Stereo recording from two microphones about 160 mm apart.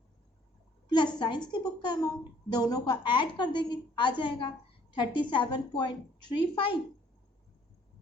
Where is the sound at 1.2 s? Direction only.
30° left (ahead or behind).